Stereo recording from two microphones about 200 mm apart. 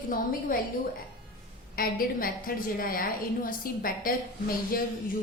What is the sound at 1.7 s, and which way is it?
A woman's voice, 45° left (ahead or behind).